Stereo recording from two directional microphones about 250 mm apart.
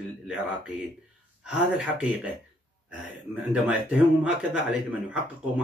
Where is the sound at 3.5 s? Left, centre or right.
Centre.